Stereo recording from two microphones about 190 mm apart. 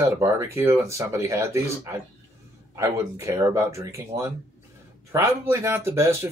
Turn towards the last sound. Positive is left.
turn(degrees=-15)  # may be behind; listen again after turning